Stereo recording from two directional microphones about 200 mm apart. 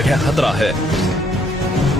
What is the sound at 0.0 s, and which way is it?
Music, centre (ahead or behind).